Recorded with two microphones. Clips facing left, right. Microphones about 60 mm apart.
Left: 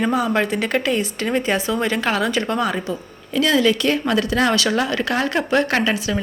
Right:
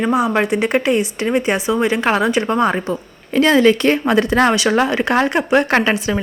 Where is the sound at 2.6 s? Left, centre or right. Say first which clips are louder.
Right 5 dB; right.